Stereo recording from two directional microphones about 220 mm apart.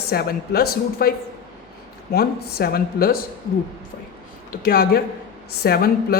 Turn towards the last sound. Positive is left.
turn(degrees=45)  # may be behind; listen again after turning